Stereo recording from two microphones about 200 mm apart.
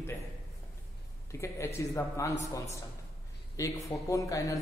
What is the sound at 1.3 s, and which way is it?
A man's voice, 15° left (ahead or behind).